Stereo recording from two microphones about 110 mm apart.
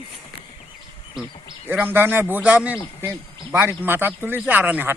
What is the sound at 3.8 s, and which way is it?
A man's voice, 20° right (ahead or behind).